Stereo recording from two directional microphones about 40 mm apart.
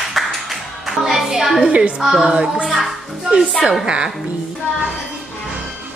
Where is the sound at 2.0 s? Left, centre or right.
Centre.